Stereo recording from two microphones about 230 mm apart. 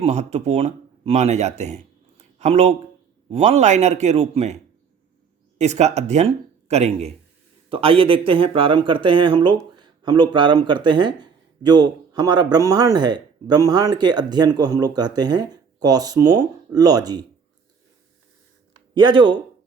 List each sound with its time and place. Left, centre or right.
0.0 s a man's voice: right
5.5 s speech: right
18.9 s a man's voice: centre